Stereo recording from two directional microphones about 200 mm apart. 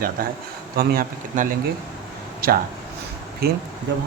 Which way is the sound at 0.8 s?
45° right (ahead or behind).